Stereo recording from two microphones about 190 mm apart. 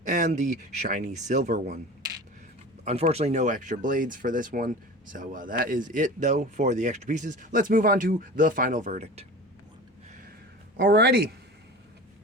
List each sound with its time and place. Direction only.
0.0 s speech: 40° right (ahead or behind)
2.8 s speech: 35° right (ahead or behind)
10.8 s speech: 60° right (ahead or behind)